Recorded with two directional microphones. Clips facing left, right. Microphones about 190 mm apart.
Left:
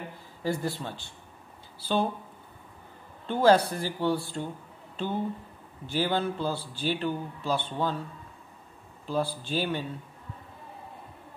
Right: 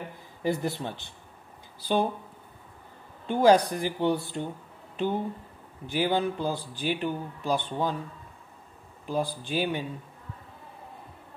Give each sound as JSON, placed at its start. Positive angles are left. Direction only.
{"t": 0.4, "sound": "speech", "side_deg": -20}
{"t": 3.3, "sound": "speech", "side_deg": -15}
{"t": 9.0, "sound": "speech", "side_deg": -15}